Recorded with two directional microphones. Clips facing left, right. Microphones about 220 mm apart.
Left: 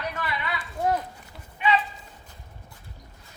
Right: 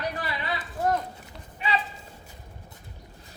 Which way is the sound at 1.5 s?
35° right (ahead or behind).